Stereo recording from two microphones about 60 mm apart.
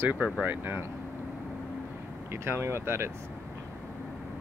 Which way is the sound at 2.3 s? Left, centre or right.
Right.